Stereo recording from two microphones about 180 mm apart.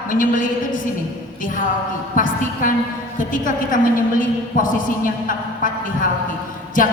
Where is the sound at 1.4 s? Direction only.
45° left (ahead or behind).